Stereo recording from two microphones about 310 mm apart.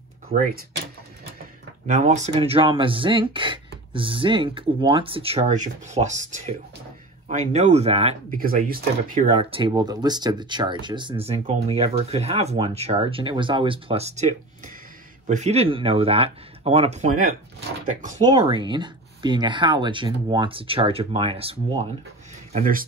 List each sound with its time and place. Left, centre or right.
1.9 s speech: right
7.2 s speech: right